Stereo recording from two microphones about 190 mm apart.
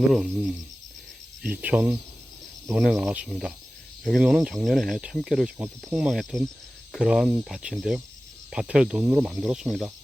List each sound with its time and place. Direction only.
0.1 s speech: centre (ahead or behind)